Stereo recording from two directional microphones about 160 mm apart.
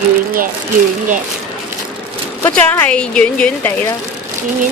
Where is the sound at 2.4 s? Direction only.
10° left (ahead or behind).